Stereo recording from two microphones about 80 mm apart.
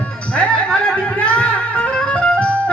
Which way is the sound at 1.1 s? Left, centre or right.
Centre.